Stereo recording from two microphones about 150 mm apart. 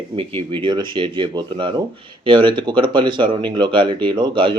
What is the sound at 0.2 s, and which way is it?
Speech, 35° right (ahead or behind).